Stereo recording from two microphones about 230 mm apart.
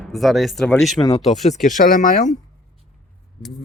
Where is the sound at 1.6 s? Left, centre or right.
Left.